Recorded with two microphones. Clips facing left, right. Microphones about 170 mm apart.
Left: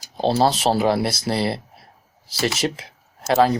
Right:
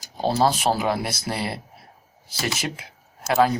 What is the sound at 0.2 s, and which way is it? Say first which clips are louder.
Speech: left 2 dB; 30° left (ahead or behind).